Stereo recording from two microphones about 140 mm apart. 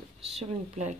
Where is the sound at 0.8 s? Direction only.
60° right (ahead or behind).